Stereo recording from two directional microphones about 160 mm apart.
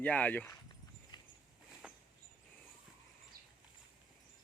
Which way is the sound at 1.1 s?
25° left (ahead or behind).